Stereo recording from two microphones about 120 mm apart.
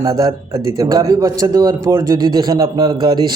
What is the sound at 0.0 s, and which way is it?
A man's voice, 25° right (ahead or behind).